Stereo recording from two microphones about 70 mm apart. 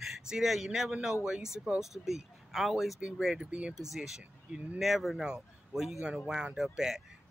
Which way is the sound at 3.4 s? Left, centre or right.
Centre.